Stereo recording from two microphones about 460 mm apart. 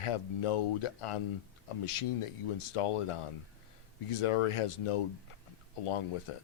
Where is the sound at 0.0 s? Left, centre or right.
Left.